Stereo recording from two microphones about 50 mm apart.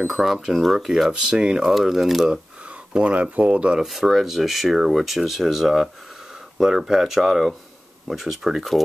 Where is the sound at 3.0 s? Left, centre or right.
Right.